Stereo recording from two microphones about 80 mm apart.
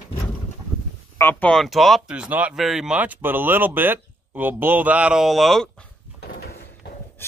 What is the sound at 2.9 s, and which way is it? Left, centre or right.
Speech, centre.